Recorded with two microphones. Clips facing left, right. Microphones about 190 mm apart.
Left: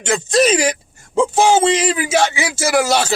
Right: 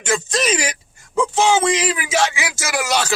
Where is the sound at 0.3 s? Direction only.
30° left (ahead or behind).